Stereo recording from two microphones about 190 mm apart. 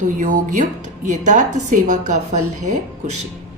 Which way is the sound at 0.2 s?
40° right (ahead or behind).